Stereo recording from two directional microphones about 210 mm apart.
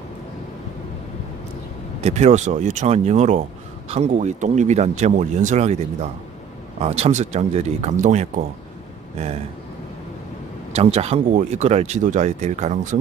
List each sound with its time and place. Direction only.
2.0 s speech: 30° right (ahead or behind)
10.7 s speech: 30° right (ahead or behind)